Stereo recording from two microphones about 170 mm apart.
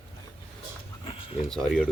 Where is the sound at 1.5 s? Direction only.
Centre (ahead or behind).